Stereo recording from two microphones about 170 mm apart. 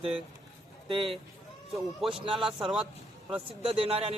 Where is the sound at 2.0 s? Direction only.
30° right (ahead or behind).